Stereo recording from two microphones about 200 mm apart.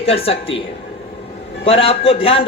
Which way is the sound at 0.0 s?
30° left (ahead or behind).